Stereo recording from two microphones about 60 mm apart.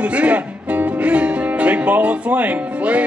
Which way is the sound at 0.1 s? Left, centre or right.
Right.